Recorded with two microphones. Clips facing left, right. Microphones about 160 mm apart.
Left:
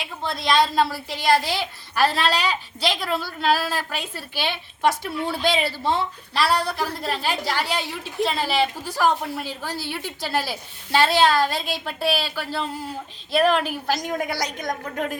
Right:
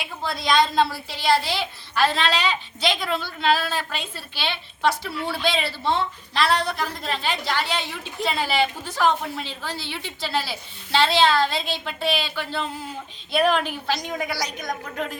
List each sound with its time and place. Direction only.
0.0 s a woman's voice: centre (ahead or behind)
14.3 s a woman's voice: 50° left (ahead or behind)